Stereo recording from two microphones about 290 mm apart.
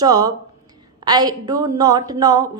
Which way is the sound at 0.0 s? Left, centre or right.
Centre.